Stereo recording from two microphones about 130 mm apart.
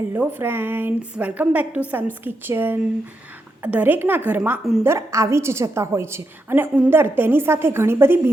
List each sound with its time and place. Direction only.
0.1 s a woman's voice: 15° right (ahead or behind)